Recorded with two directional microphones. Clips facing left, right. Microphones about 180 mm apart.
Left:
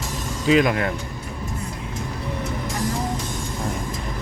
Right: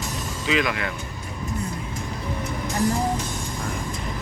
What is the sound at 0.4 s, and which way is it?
Speech, 40° left (ahead or behind).